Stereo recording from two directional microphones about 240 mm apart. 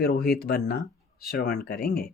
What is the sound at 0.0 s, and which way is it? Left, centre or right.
Speech, left.